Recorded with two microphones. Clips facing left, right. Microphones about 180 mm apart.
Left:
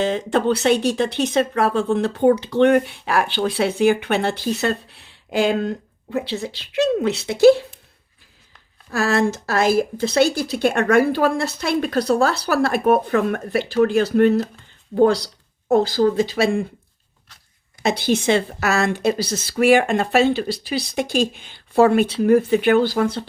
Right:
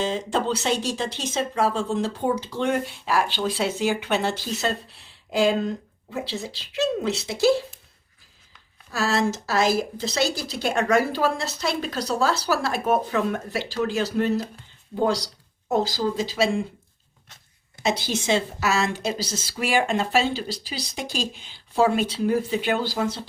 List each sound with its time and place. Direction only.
0.0 s speech: 60° left (ahead or behind)
8.9 s speech: 55° left (ahead or behind)
17.8 s speech: 60° left (ahead or behind)